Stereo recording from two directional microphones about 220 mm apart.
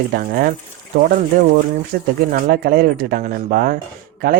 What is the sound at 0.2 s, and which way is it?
Speech, 40° right (ahead or behind).